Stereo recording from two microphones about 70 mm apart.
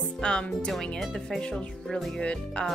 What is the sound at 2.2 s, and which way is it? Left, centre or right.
Music, centre.